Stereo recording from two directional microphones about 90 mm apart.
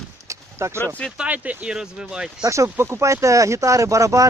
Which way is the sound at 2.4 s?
35° right (ahead or behind).